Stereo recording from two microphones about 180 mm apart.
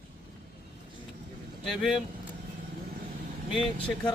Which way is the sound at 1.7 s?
Centre (ahead or behind).